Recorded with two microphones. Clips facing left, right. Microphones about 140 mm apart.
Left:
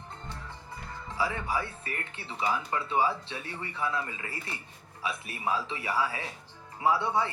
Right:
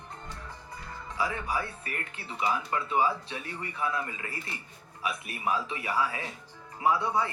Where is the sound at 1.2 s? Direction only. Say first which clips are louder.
Even; 30° left (ahead or behind).